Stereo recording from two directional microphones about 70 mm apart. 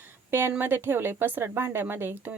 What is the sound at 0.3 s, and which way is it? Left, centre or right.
A woman's voice, right.